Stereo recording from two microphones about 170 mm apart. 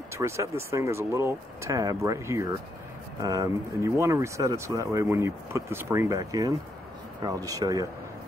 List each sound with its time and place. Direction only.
0.1 s speech: 15° right (ahead or behind)